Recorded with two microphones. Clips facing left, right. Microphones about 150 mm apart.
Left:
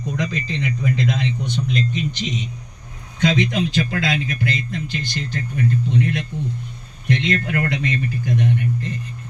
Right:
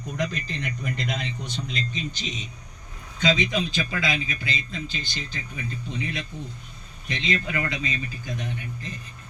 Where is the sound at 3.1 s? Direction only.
70° left (ahead or behind).